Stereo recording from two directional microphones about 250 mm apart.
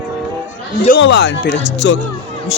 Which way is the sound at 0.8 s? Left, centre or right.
Left.